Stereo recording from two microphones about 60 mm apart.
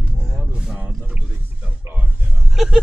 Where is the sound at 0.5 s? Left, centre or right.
Centre.